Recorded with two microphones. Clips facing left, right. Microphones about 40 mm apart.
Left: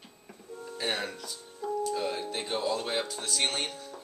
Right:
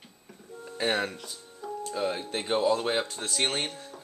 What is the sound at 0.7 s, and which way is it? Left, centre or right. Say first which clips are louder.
Music: right 5 dB; centre.